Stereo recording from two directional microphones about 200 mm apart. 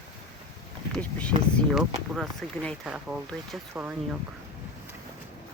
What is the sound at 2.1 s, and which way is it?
Speech, centre (ahead or behind).